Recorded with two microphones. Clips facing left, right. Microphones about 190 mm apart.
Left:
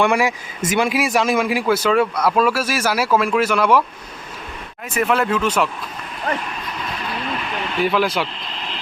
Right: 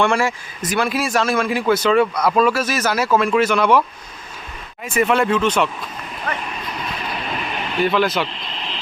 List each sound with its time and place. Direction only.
0.0 s a man's voice: 15° left (ahead or behind)
4.9 s speech: centre (ahead or behind)
7.8 s speech: 5° left (ahead or behind)